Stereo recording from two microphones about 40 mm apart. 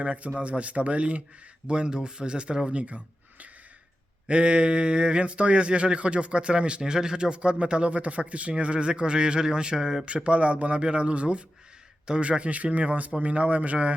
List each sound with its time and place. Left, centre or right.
0.0 s a man's voice: right
1.6 s a man's voice: right
4.3 s speech: right
10.2 s a man's voice: right